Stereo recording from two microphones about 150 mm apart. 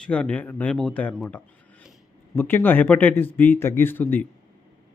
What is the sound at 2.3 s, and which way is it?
Speech, 15° left (ahead or behind).